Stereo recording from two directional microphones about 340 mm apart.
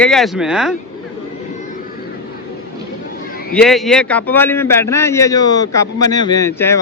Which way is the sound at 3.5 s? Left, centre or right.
Centre.